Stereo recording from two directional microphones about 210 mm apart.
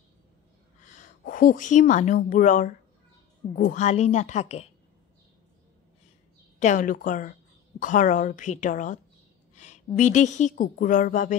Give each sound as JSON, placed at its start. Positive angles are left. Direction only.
{"t": 1.2, "sound": "speech", "side_deg": 40}
{"t": 6.6, "sound": "speech", "side_deg": 40}
{"t": 9.6, "sound": "a sound", "side_deg": 35}
{"t": 9.9, "sound": "speech", "side_deg": 35}